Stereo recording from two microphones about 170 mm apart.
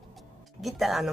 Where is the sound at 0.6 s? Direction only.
Centre (ahead or behind).